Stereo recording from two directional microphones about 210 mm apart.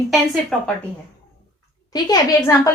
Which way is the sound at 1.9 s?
20° left (ahead or behind).